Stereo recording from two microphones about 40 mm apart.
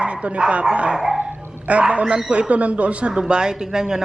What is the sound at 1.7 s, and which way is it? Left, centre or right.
A man's voice, right.